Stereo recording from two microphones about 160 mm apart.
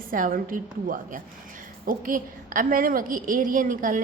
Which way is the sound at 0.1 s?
60° right (ahead or behind).